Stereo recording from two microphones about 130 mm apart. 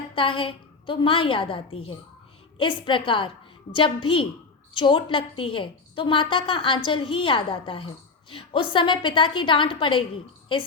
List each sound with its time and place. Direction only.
0.2 s a woman's voice: 40° left (ahead or behind)